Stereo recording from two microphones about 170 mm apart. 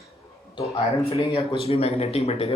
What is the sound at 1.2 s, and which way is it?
Speech, 35° left (ahead or behind).